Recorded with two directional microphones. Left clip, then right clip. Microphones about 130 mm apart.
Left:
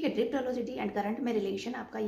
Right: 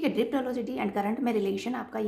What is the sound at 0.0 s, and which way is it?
A woman's voice, 35° right (ahead or behind).